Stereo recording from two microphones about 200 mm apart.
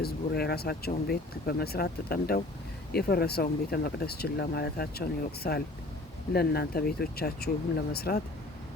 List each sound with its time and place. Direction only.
0.0 s speech: 50° left (ahead or behind)